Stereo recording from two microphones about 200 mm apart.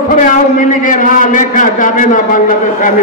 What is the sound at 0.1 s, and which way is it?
A man's voice, 40° left (ahead or behind).